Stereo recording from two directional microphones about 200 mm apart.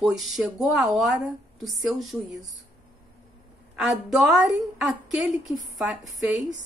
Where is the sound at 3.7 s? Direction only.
5° right (ahead or behind).